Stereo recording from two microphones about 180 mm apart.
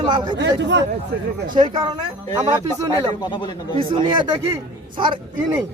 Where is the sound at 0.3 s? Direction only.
75° right (ahead or behind).